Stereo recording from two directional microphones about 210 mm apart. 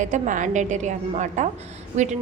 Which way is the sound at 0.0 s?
35° right (ahead or behind).